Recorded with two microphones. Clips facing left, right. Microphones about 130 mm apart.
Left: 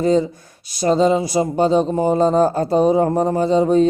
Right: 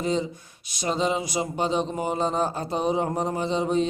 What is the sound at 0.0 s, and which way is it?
Speech, 40° left (ahead or behind).